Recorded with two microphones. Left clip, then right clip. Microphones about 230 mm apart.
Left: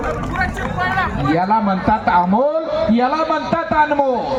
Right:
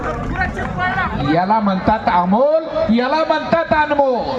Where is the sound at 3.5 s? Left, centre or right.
Right.